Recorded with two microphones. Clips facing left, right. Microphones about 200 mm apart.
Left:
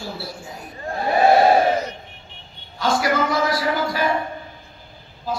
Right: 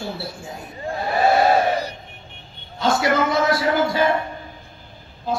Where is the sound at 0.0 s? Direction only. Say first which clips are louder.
Right 2 dB; 25° right (ahead or behind).